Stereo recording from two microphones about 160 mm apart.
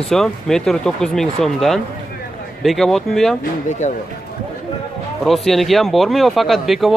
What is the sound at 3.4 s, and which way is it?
Speech, 50° left (ahead or behind).